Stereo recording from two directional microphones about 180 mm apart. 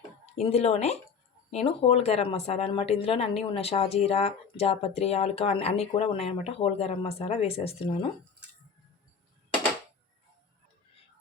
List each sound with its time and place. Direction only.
0.3 s speech: 35° left (ahead or behind)